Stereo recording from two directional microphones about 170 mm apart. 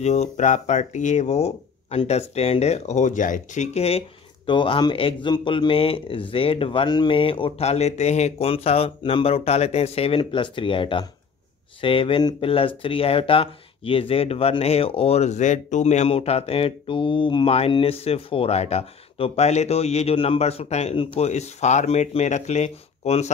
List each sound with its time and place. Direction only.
0.0 s speech: 40° left (ahead or behind)